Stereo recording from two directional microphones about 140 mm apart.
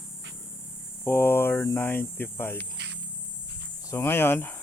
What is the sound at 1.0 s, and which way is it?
Speech, 15° left (ahead or behind).